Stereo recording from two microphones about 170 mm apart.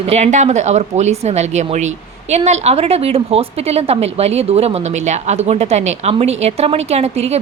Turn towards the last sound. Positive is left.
turn(degrees=-40)  # may be behind; listen again after turning